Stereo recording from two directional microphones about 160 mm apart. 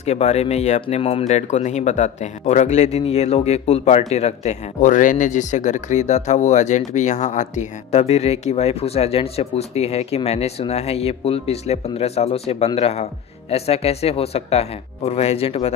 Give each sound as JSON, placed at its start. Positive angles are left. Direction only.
{"t": 0.0, "sound": "speech", "side_deg": 45}